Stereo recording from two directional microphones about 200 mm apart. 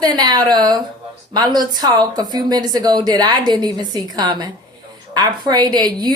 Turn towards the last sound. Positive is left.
turn(degrees=-20)  # may be behind; listen again after turning